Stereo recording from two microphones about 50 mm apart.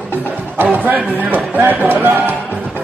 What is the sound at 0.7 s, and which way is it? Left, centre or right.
Speech, right.